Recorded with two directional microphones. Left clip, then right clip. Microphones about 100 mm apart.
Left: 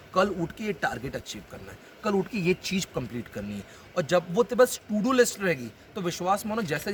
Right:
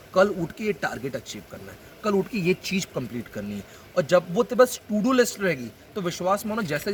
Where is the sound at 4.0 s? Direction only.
25° left (ahead or behind).